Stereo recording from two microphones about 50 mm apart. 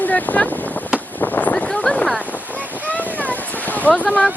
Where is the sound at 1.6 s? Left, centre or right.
Centre.